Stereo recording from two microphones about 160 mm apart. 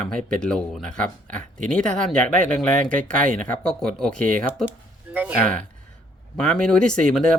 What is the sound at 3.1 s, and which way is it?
Speech, 55° right (ahead or behind).